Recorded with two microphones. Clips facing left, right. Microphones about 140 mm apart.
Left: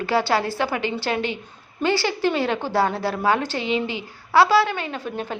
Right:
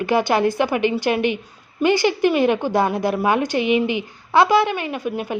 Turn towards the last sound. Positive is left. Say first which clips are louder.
# right 4 dB
turn(degrees=-15)  # may be behind; listen again after turning